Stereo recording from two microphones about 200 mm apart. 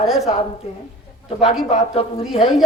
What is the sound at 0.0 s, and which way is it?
Speech, centre (ahead or behind).